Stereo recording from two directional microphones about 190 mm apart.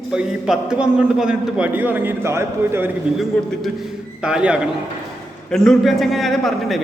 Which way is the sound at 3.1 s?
Centre (ahead or behind).